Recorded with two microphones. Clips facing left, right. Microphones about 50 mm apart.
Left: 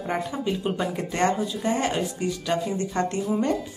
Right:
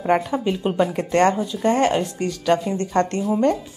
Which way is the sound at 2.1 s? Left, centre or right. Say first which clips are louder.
Right 2 dB; right.